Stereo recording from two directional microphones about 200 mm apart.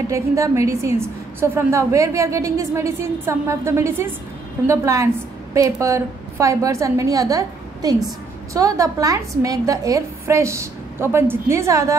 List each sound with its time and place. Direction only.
0.1 s a woman's voice: 15° right (ahead or behind)